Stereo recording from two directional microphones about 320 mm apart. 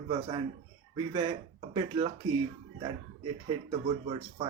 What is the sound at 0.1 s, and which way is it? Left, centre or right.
Speech, centre.